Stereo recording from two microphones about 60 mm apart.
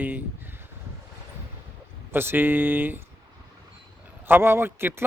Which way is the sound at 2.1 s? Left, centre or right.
Right.